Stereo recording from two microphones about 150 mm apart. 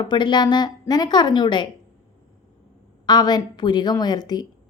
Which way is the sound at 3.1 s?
25° left (ahead or behind).